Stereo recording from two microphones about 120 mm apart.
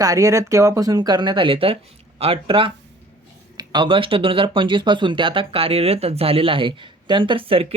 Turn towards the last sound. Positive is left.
turn(degrees=-50)  # may be behind; listen again after turning